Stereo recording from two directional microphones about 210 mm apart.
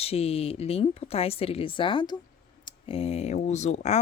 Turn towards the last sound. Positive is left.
turn(degrees=30)  # may be behind; listen again after turning